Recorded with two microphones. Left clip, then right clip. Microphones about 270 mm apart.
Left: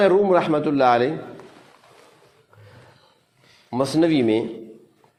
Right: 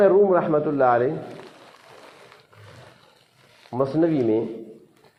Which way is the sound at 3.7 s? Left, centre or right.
Left.